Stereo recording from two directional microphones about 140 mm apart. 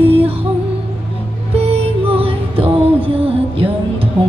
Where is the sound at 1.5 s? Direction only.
45° right (ahead or behind).